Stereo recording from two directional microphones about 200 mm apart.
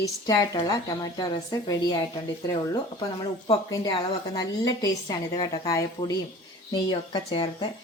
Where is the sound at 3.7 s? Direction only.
20° left (ahead or behind).